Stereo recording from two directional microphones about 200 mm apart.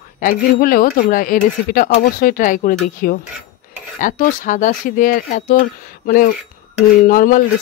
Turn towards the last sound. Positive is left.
turn(degrees=45)  # may be behind; listen again after turning